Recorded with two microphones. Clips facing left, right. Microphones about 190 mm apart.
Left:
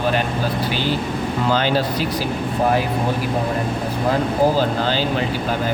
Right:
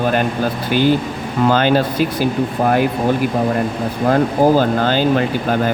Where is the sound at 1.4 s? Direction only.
55° right (ahead or behind).